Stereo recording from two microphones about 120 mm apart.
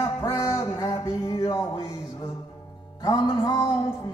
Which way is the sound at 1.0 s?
40° left (ahead or behind).